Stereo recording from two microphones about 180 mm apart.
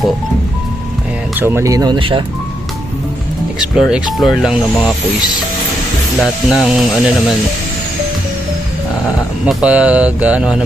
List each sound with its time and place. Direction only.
1.4 s speech: 15° right (ahead or behind)
3.6 s speech: centre (ahead or behind)
6.2 s speech: centre (ahead or behind)
9.5 s speech: 5° right (ahead or behind)